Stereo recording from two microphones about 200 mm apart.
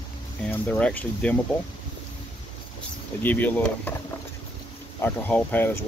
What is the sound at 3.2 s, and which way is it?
Speech, 10° left (ahead or behind).